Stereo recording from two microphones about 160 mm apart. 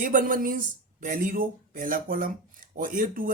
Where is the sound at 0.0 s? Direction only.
55° right (ahead or behind).